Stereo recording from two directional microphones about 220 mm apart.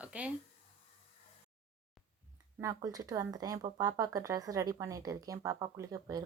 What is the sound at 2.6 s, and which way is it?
Speech, 15° right (ahead or behind).